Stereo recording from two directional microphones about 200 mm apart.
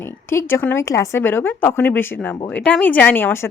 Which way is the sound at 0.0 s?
10° left (ahead or behind).